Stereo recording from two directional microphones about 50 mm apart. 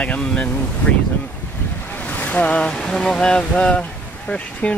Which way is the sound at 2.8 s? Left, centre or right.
Centre.